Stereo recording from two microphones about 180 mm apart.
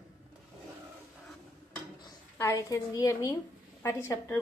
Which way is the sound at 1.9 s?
20° left (ahead or behind).